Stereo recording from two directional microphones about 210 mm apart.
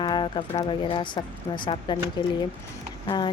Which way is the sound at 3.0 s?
20° left (ahead or behind).